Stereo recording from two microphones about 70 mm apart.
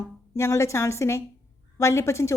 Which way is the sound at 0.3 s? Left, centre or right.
Left.